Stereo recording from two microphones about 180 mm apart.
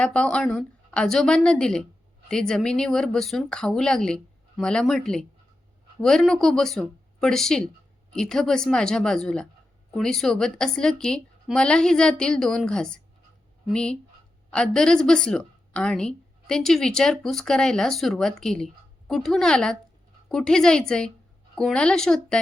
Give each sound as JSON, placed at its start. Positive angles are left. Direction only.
{"t": 0.0, "sound": "a woman's voice", "side_deg": 5}